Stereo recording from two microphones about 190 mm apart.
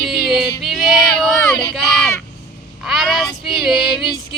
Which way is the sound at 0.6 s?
Centre (ahead or behind).